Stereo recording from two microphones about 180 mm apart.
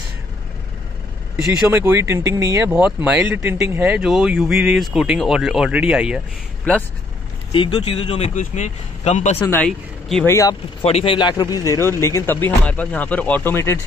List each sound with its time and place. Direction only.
1.4 s speech: 10° right (ahead or behind)
2.7 s speech: 5° right (ahead or behind)
7.5 s speech: 30° left (ahead or behind)
9.5 s speech: 5° left (ahead or behind)
10.2 s speech: 15° left (ahead or behind)
10.8 s speech: 35° left (ahead or behind); by 13.7 s 15° left (ahead or behind)